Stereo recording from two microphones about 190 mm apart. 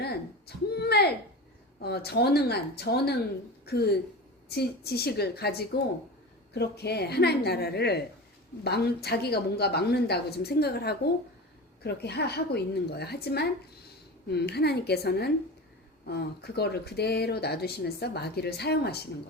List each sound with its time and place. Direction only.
0.0 s speech: 55° left (ahead or behind)